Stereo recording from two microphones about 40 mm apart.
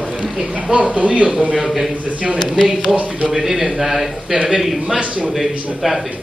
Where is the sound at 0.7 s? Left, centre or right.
Right.